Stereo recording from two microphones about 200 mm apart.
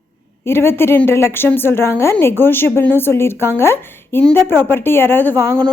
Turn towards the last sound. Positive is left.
turn(degrees=10)  # may be behind; listen again after turning